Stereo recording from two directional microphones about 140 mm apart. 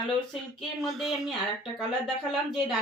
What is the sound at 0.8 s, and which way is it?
Speech, centre (ahead or behind).